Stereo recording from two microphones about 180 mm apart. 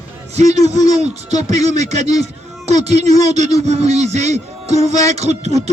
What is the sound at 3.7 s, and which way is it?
A man's voice, 35° right (ahead or behind).